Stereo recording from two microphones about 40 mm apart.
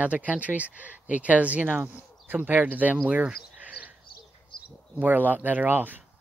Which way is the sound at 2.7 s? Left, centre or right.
Right.